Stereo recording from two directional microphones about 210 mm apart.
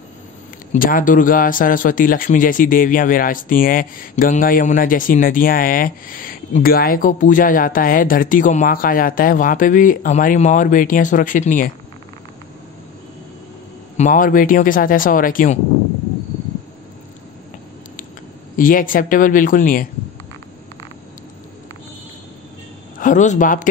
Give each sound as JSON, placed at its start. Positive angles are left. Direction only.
{"t": 0.7, "sound": "speech", "side_deg": 40}
{"t": 13.9, "sound": "speech", "side_deg": 40}
{"t": 18.6, "sound": "speech", "side_deg": 40}
{"t": 22.9, "sound": "speech", "side_deg": 35}